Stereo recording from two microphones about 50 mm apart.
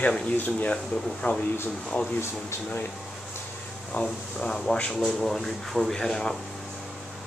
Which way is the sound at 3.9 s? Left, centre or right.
Centre.